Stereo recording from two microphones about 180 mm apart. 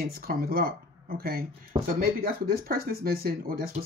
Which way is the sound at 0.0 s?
55° right (ahead or behind).